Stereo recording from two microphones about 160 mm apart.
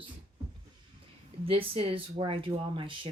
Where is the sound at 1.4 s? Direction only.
35° right (ahead or behind).